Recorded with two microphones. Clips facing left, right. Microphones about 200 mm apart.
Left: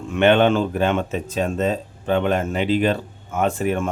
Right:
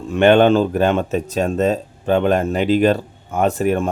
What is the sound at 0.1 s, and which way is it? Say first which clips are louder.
Speech: right 4 dB; 40° right (ahead or behind).